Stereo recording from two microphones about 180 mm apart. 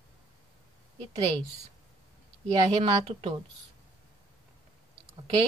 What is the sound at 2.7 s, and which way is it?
Speech, 35° right (ahead or behind).